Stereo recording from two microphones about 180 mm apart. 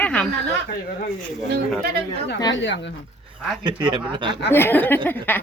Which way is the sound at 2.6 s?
80° left.